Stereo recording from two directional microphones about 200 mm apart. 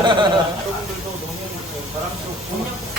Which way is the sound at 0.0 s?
25° right (ahead or behind).